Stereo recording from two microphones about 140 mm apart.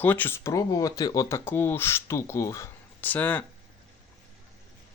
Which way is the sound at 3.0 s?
10° left (ahead or behind).